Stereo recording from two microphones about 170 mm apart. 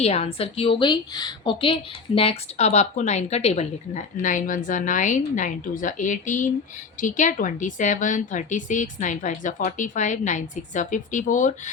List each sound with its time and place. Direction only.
0.0 s a woman's voice: 40° left (ahead or behind)